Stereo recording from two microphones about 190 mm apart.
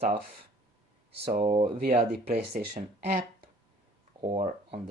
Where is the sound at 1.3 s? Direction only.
40° right (ahead or behind).